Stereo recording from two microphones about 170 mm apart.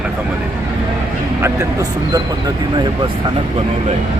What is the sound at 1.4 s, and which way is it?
Speech, 20° right (ahead or behind).